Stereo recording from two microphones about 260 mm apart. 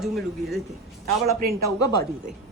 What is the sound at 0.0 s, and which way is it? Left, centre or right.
Speech, centre.